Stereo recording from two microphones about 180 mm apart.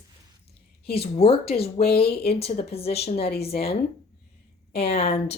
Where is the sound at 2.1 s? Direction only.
60° left (ahead or behind).